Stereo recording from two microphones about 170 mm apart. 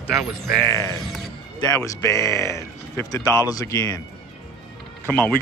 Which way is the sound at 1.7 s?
20° left (ahead or behind).